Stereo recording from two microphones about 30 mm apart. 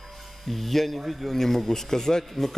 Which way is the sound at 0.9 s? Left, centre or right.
Centre.